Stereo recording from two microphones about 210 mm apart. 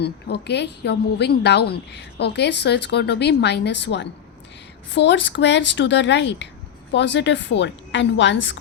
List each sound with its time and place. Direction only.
0.0 s a woman's voice: 50° left (ahead or behind)